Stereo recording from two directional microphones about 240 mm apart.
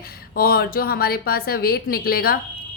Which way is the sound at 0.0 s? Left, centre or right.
Left.